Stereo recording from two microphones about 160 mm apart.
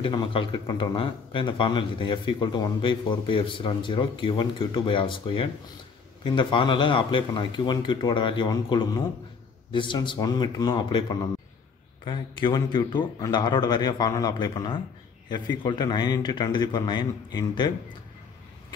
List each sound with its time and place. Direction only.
0.0 s a man's voice: 30° left (ahead or behind)